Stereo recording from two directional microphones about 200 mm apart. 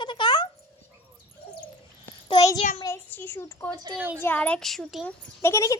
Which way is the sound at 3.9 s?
10° right (ahead or behind).